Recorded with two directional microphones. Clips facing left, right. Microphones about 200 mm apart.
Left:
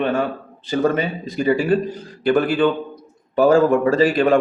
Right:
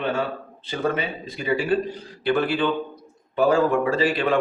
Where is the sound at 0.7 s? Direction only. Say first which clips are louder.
Left 6 dB; 40° left (ahead or behind).